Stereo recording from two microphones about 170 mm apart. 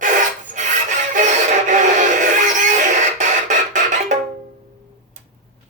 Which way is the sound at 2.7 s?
50° right (ahead or behind).